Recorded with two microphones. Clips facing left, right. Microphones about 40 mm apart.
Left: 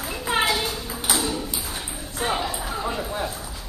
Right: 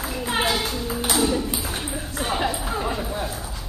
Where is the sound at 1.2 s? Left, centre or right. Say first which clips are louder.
Right 5 dB; right.